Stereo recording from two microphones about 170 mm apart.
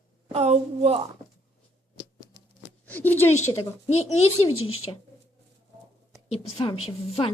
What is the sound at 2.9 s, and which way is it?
Speech, 10° left (ahead or behind).